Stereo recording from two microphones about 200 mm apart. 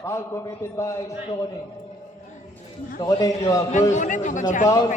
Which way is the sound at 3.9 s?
40° left (ahead or behind).